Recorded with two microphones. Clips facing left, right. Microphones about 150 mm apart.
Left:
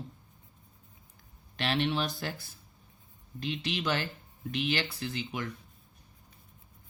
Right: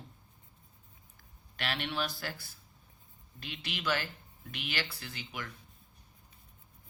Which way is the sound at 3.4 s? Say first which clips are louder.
Left 5 dB; 25° left (ahead or behind).